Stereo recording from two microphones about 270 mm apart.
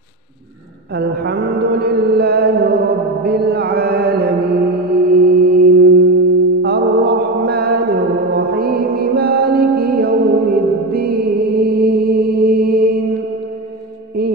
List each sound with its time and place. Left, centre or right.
0.9 s mantra: right
5.1 s singing bowl: right
6.6 s mantra: right